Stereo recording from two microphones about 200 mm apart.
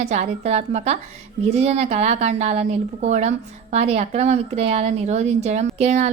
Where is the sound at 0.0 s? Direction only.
35° right (ahead or behind).